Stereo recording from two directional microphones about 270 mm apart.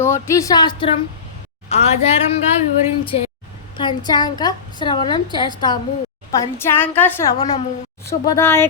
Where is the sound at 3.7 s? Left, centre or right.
Centre.